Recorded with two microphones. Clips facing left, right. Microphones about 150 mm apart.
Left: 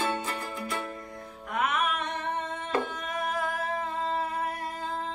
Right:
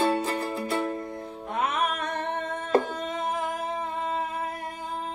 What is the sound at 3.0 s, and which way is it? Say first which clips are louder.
Singing: right 2 dB; 25° right (ahead or behind).